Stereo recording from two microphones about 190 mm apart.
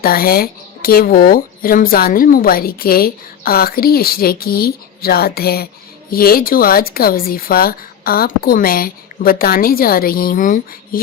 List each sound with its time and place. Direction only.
0.0 s speech: 50° left (ahead or behind)